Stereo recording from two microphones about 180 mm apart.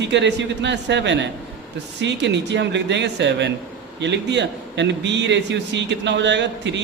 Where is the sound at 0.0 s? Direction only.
75° right (ahead or behind).